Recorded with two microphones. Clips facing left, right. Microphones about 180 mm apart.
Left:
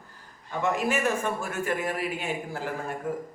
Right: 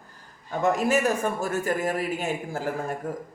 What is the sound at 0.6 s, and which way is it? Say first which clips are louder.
Speech: right 4 dB; 40° right (ahead or behind).